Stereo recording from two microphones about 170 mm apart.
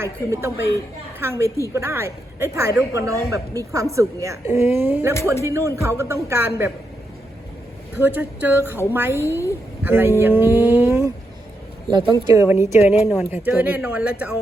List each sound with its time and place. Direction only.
0.0 s a man's voice: 15° right (ahead or behind)
7.9 s a man's voice: 10° right (ahead or behind)
11.9 s a man's voice: 25° right (ahead or behind); by 14.3 s 10° right (ahead or behind)